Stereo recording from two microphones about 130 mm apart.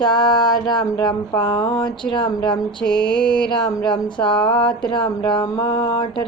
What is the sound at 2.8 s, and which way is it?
Mantra, 5° left (ahead or behind).